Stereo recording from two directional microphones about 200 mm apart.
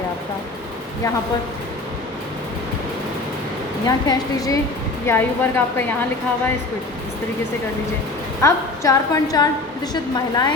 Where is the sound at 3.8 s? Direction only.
20° left (ahead or behind).